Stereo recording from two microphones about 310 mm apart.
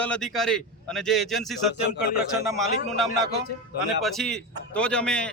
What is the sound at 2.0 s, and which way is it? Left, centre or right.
Speech, left.